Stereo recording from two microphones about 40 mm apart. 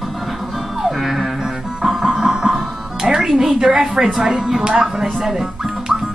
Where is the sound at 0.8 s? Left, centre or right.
Centre.